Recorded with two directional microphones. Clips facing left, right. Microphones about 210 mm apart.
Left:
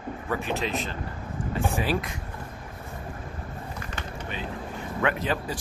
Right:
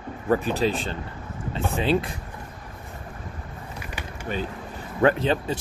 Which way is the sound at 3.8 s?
15° right (ahead or behind).